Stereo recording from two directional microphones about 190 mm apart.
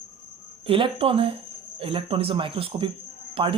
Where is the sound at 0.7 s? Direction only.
30° right (ahead or behind).